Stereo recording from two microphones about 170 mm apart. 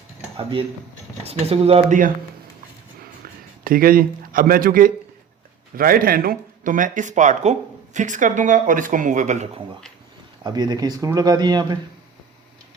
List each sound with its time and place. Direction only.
1.2 s speech: 35° right (ahead or behind)
3.6 s speech: 60° right (ahead or behind)
10.4 s speech: 25° right (ahead or behind)